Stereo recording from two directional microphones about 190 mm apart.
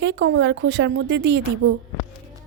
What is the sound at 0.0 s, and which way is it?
Speech, 75° right (ahead or behind).